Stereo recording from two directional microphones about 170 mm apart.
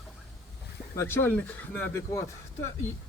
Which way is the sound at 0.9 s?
15° left (ahead or behind).